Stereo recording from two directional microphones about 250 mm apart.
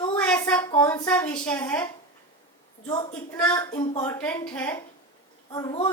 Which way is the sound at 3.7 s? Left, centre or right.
Left.